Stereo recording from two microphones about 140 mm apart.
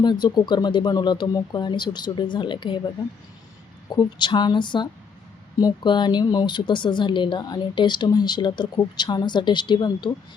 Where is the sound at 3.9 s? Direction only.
30° left (ahead or behind).